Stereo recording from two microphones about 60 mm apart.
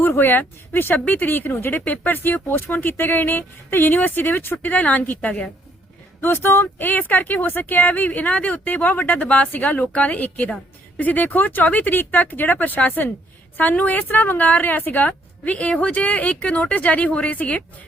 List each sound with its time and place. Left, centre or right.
0.0 s speech: left
4.5 s speech: left
6.2 s speech: left